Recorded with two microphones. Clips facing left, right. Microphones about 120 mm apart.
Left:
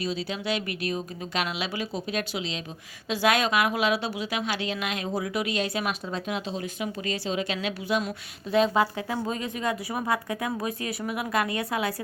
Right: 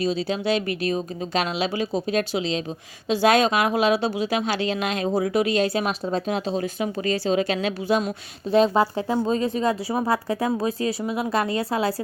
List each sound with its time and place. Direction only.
0.0 s a woman's voice: 30° right (ahead or behind)